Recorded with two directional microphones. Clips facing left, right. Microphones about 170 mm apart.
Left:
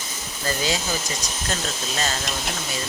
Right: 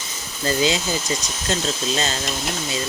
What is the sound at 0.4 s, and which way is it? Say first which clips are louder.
Speech: right 5 dB; 20° right (ahead or behind).